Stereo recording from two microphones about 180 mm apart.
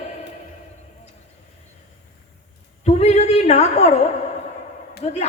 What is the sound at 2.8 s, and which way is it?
A woman's voice, 40° left (ahead or behind).